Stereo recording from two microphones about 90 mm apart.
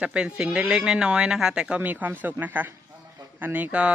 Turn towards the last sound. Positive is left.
turn(degrees=-15)  # may be behind; listen again after turning